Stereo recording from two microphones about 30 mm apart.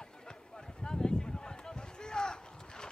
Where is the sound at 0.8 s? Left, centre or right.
Left.